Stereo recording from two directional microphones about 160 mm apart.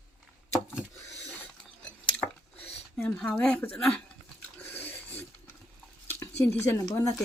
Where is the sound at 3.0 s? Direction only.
10° left (ahead or behind).